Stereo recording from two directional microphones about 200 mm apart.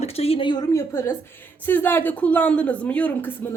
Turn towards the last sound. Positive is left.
turn(degrees=5)  # may be behind; listen again after turning